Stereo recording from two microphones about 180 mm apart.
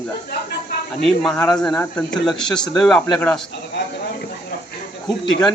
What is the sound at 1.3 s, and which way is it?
Speech, 20° left (ahead or behind).